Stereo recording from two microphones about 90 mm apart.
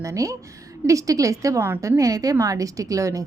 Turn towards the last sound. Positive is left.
turn(degrees=-35)  # may be behind; listen again after turning